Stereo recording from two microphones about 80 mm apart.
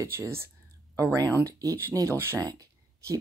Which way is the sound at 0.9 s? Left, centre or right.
Right.